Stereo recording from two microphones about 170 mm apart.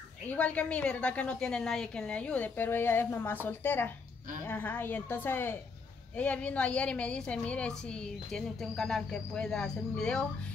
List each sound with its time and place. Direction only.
0.3 s a woman's voice: 10° left (ahead or behind)